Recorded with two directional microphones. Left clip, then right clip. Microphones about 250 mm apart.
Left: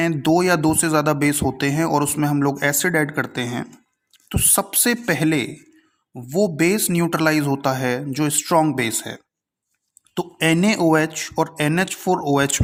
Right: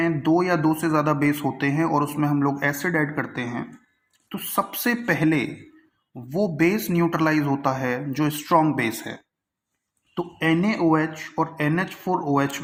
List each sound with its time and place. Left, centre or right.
0.0 s speech: left